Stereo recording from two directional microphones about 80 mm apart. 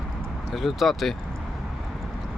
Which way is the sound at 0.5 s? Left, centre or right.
Centre.